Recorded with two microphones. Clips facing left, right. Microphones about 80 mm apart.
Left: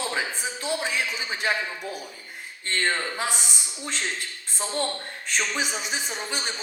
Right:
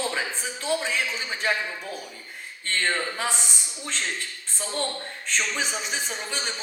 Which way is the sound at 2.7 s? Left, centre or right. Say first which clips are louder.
Even; centre.